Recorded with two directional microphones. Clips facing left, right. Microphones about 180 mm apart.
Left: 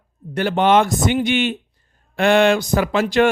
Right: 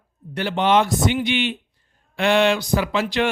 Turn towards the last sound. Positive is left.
turn(degrees=45)  # may be behind; listen again after turning